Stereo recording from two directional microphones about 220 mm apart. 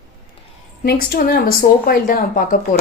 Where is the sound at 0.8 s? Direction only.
45° left (ahead or behind).